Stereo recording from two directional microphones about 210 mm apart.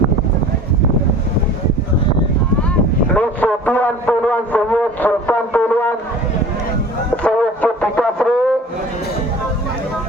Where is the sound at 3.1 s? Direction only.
5° left (ahead or behind).